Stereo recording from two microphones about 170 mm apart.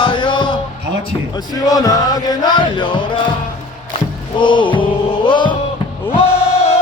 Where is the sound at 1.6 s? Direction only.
20° left (ahead or behind).